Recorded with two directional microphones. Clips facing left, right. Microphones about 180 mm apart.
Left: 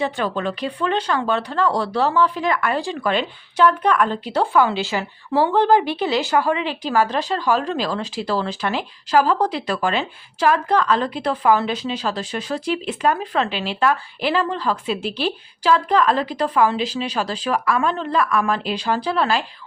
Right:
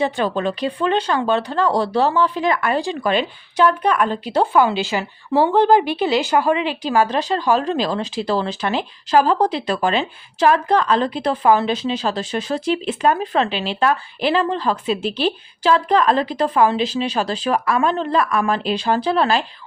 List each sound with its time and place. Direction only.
0.0 s speech: 25° right (ahead or behind)